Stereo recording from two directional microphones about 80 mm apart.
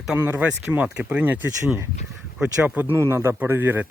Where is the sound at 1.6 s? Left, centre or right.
Right.